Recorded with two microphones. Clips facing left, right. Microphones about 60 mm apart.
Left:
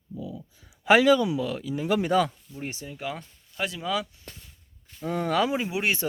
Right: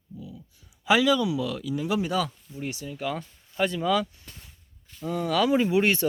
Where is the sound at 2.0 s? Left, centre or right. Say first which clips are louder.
Left 4 dB; left.